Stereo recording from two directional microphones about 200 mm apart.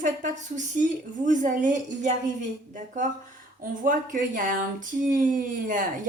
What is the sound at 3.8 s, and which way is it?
A woman's voice, 40° right (ahead or behind).